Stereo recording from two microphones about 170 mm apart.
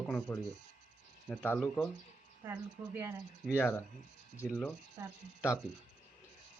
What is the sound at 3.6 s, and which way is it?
Speech, 10° left (ahead or behind).